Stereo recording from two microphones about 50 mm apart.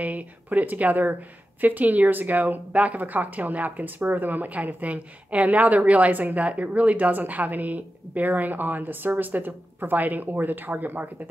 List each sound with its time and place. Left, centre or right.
0.0 s speech: right